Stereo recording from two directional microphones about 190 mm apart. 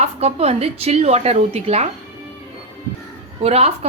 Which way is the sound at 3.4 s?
35° right (ahead or behind).